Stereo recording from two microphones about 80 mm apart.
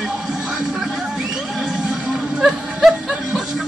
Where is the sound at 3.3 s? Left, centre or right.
Centre.